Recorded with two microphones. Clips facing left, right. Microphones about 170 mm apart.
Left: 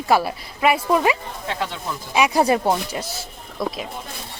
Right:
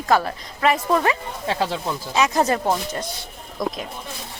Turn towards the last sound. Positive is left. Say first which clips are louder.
# even
turn(degrees=5)  # may be behind; listen again after turning